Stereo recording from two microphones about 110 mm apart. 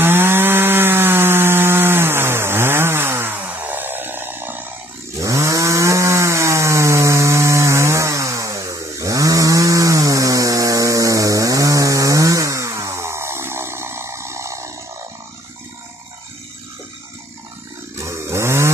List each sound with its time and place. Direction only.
0.0 s chainsaw: 20° right (ahead or behind)
17.9 s chainsaw: 25° right (ahead or behind)